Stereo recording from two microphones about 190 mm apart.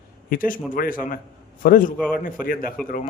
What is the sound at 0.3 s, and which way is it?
A man's voice, 45° left (ahead or behind).